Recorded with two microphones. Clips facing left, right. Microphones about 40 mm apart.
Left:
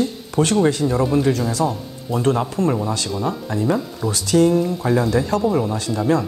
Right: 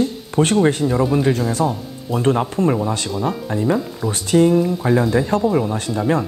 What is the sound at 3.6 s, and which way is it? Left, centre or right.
Speech, centre.